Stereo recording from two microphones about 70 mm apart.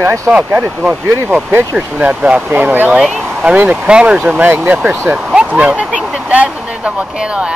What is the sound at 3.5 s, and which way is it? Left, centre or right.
Speech, right.